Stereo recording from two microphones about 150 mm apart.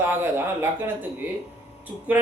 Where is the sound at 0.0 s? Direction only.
15° right (ahead or behind).